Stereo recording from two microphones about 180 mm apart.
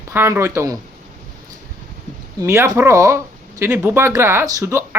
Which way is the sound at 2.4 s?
15° right (ahead or behind).